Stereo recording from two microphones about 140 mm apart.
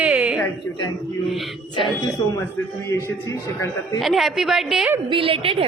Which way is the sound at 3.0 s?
20° left (ahead or behind).